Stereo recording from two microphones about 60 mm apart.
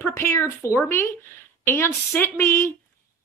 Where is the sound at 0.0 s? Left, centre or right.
Left.